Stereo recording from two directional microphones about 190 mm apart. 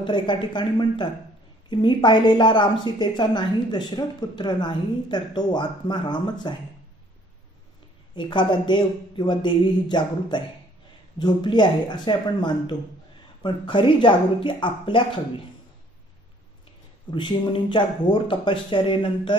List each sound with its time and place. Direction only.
0.0 s a woman's voice: 25° left (ahead or behind)
8.1 s a woman's voice: 25° left (ahead or behind)
17.1 s a woman's voice: 25° left (ahead or behind)